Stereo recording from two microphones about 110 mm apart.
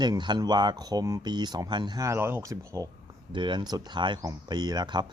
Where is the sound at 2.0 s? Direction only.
25° right (ahead or behind).